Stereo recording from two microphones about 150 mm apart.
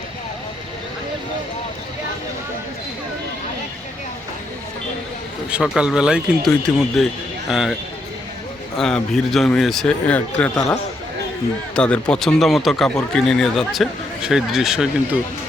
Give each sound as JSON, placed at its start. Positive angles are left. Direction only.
{"t": 5.5, "sound": "speech", "side_deg": -5}
{"t": 8.8, "sound": "speech", "side_deg": 5}
{"t": 11.7, "sound": "speech", "side_deg": 5}